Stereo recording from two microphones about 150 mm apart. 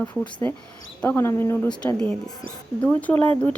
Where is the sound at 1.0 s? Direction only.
15° left (ahead or behind).